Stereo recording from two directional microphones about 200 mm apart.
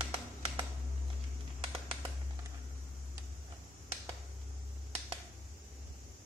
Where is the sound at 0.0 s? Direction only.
25° right (ahead or behind).